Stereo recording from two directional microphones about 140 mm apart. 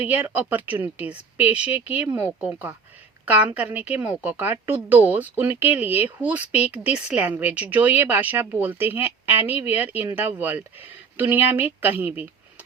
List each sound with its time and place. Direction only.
0.0 s speech: 10° right (ahead or behind)
2.0 s speech: 20° right (ahead or behind)
2.4 s speech: 10° right (ahead or behind)